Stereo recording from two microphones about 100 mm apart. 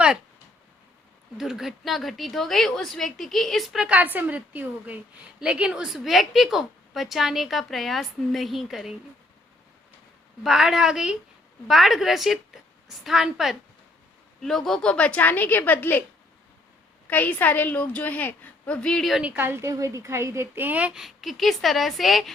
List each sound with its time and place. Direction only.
1.4 s a woman's voice: 5° right (ahead or behind)
3.8 s a woman's voice: 15° right (ahead or behind)
10.4 s a woman's voice: 5° right (ahead or behind); by 16.0 s 20° left (ahead or behind)
17.1 s a woman's voice: 15° left (ahead or behind)
19.2 s a woman's voice: 15° right (ahead or behind); by 22.3 s centre (ahead or behind)